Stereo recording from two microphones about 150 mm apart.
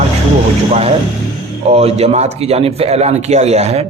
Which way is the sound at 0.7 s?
45° right (ahead or behind).